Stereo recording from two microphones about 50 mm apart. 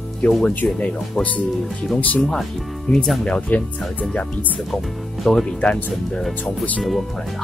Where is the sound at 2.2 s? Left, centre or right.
Centre.